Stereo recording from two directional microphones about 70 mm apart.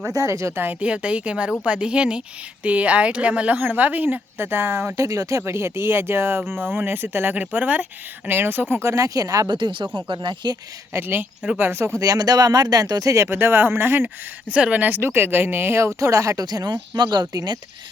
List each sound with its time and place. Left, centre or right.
0.1 s speech: right
0.6 s a woman's voice: right
5.4 s speech: right
8.7 s speech: right
10.9 s speech: right
11.9 s speech: right
13.2 s speech: right
14.4 s speech: centre; by 17.6 s right